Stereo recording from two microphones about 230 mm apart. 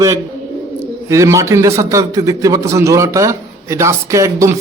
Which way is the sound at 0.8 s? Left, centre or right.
Centre.